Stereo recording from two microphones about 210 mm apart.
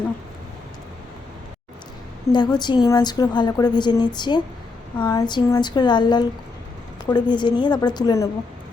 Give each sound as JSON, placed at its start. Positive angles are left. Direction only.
{"t": 2.3, "sound": "a woman's voice", "side_deg": 20}